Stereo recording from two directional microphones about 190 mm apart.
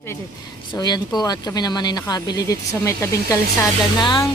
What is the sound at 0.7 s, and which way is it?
Speech, 20° left (ahead or behind).